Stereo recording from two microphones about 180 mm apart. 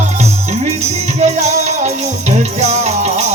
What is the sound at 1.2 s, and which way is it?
Music, 40° right (ahead or behind).